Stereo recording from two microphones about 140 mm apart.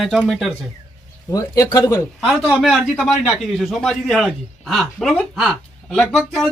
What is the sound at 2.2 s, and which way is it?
A man's voice, 5° right (ahead or behind).